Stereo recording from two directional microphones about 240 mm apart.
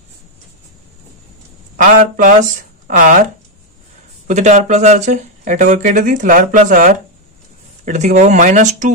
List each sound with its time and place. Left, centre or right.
1.8 s speech: right
4.3 s speech: right